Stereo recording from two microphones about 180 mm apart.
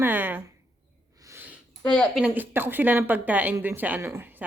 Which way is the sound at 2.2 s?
10° right (ahead or behind).